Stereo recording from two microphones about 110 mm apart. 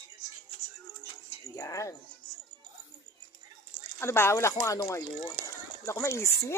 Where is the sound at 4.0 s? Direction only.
25° left (ahead or behind).